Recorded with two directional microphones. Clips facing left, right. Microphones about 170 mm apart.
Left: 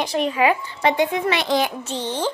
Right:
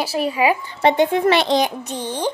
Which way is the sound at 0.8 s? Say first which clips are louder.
Right 6 dB; 30° right (ahead or behind).